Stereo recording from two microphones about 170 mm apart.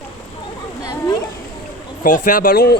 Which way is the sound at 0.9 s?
25° left (ahead or behind).